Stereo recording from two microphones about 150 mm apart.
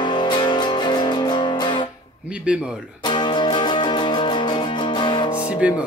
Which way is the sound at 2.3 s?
5° right (ahead or behind).